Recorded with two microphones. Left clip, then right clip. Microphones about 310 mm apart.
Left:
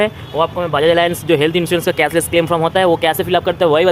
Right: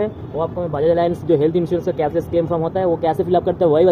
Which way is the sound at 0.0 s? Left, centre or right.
Left.